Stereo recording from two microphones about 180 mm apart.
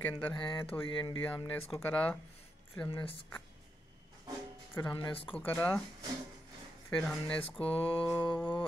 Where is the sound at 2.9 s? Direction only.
30° left (ahead or behind).